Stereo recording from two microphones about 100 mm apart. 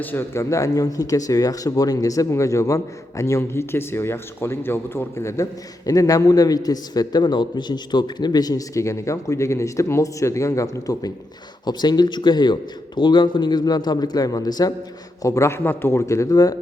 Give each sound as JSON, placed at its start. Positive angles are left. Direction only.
{"t": 0.0, "sound": "speech", "side_deg": 20}
{"t": 11.6, "sound": "a man's voice", "side_deg": 45}